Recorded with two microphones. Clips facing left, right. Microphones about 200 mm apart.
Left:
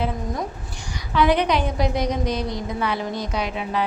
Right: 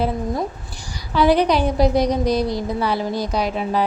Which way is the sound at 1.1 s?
35° right (ahead or behind).